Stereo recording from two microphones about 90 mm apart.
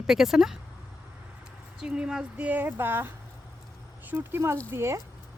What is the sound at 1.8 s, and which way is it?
Speech, 10° right (ahead or behind).